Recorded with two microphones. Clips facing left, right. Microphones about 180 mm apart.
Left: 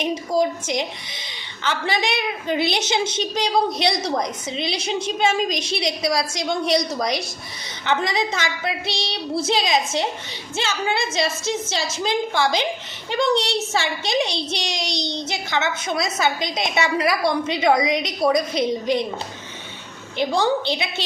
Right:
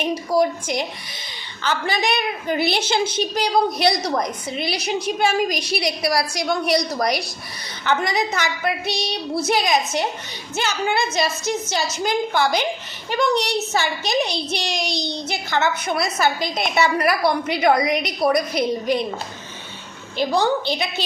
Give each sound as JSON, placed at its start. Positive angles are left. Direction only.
{"t": 0.1, "sound": "a woman's voice", "side_deg": 20}
{"t": 15.4, "sound": "a woman's voice", "side_deg": -50}
{"t": 16.0, "sound": "a woman's voice", "side_deg": 20}
{"t": 20.1, "sound": "a woman's voice", "side_deg": 20}